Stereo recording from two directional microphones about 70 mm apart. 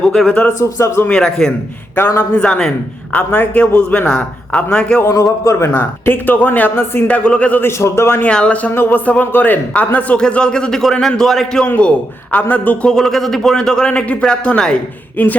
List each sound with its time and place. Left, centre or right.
0.0 s a man's voice: centre
0.6 s a man's voice: left
1.0 s a man's voice: centre
3.1 s speech: left
5.0 s a man's voice: left
5.5 s speech: left
7.2 s speech: centre
7.6 s a man's voice: left
8.2 s speech: centre
8.7 s a man's voice: left; by 11.6 s centre
11.8 s speech: centre
12.9 s a man's voice: centre
15.1 s speech: left